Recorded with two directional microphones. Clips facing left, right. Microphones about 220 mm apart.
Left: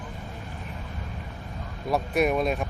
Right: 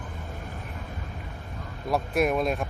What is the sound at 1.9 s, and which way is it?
Speech, centre (ahead or behind).